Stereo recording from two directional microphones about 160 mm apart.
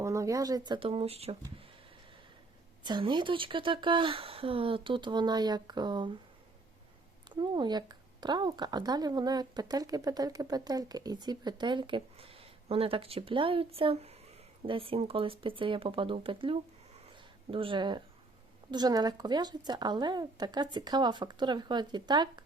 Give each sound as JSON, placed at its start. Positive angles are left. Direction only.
{"t": 0.0, "sound": "speech", "side_deg": -20}
{"t": 2.8, "sound": "speech", "side_deg": -30}
{"t": 7.3, "sound": "speech", "side_deg": -30}